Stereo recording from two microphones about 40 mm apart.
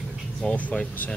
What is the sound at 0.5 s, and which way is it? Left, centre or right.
Speech, left.